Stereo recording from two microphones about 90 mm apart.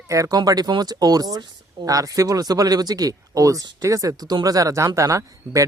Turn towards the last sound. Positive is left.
turn(degrees=-35)  # may be behind; listen again after turning